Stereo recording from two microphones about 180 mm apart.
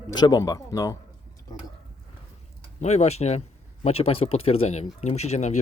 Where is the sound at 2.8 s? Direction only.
40° left (ahead or behind).